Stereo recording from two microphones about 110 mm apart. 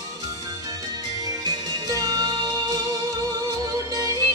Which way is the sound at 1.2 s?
35° right (ahead or behind).